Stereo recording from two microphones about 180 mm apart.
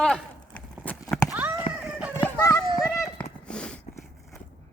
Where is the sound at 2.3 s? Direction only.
15° left (ahead or behind).